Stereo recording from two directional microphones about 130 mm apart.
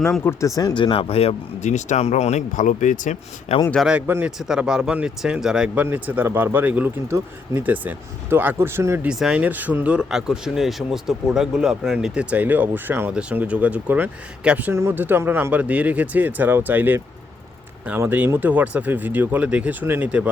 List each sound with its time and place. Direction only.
0.3 s speech: 25° left (ahead or behind)
0.8 s speech: 40° left (ahead or behind); by 3.2 s 75° left (ahead or behind)
3.5 s speech: 55° left (ahead or behind)
3.8 s speech: 10° right (ahead or behind)
9.0 s speech: 5° right (ahead or behind)